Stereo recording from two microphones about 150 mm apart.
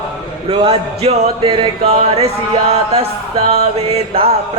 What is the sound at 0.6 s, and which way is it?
Music, 40° right (ahead or behind).